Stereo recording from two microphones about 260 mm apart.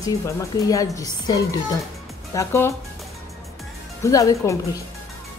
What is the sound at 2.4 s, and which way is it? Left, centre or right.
Speech, centre.